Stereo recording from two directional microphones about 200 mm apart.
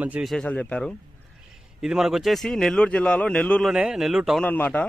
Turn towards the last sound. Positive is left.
turn(degrees=10)  # may be behind; listen again after turning